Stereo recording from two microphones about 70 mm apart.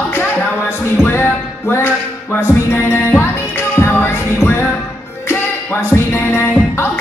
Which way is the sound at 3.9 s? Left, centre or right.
Left.